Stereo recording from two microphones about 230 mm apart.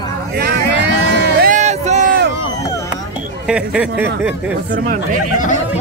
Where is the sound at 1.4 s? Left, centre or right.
Right.